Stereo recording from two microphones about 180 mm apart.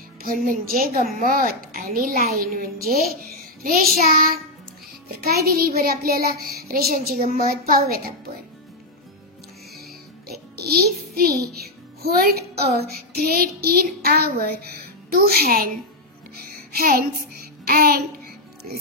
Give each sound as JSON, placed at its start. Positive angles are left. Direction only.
{"t": 0.2, "sound": "a child's voice", "side_deg": -50}
{"t": 2.3, "sound": "music", "side_deg": -55}
{"t": 3.6, "sound": "a child's voice", "side_deg": -55}
{"t": 5.2, "sound": "music", "side_deg": -60}
{"t": 7.3, "sound": "a child's voice", "side_deg": -50}
{"t": 10.5, "sound": "music", "side_deg": -60}
{"t": 16.7, "sound": "child singing", "side_deg": -55}